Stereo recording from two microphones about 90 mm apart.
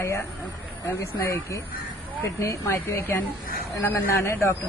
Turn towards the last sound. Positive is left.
turn(degrees=30)  # may be behind; listen again after turning